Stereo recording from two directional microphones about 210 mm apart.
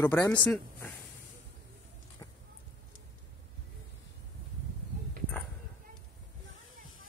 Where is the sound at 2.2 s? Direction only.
15° left (ahead or behind).